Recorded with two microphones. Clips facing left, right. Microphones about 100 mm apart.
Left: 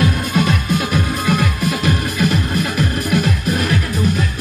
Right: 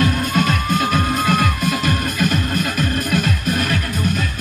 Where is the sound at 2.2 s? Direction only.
55° right (ahead or behind).